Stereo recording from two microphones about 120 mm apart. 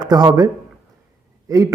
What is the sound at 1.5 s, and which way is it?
Speech, 30° right (ahead or behind).